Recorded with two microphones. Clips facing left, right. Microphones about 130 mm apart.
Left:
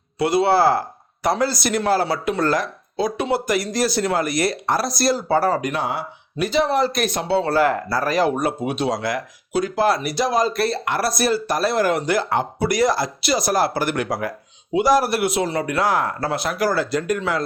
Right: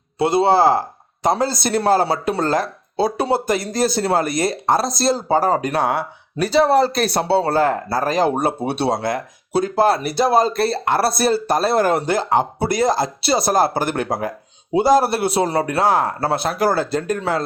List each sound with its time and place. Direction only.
0.2 s speech: 25° right (ahead or behind)
5.5 s speech: 35° right (ahead or behind)
5.8 s speech: 55° right (ahead or behind)
6.4 s speech: 35° right (ahead or behind)